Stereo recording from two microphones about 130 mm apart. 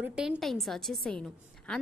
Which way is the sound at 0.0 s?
10° right (ahead or behind).